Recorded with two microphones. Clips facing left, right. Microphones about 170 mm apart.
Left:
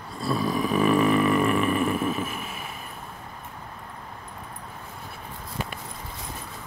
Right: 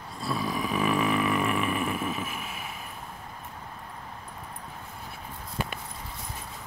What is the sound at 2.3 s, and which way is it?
Vehicle, 5° right (ahead or behind).